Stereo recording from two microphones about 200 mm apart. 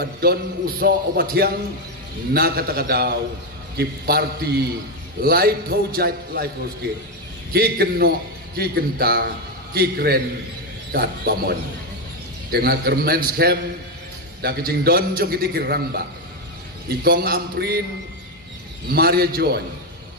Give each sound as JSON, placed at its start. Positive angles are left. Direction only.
{"t": 0.0, "sound": "a man's voice", "side_deg": -50}
{"t": 7.5, "sound": "a man's voice", "side_deg": -50}
{"t": 18.9, "sound": "a man's voice", "side_deg": -50}